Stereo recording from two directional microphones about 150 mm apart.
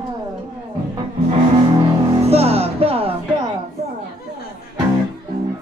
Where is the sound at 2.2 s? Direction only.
45° right (ahead or behind).